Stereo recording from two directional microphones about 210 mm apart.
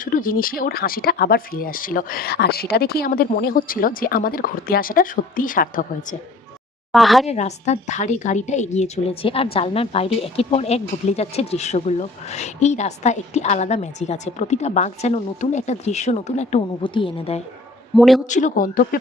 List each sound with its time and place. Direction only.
0.0 s speech: 40° left (ahead or behind)
6.9 s a woman's voice: centre (ahead or behind)
7.3 s a woman's voice: 30° left (ahead or behind)
17.9 s a woman's voice: centre (ahead or behind)
18.3 s a woman's voice: 35° left (ahead or behind)